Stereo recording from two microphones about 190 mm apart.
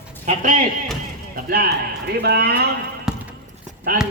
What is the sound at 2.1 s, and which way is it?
Speech, 55° right (ahead or behind).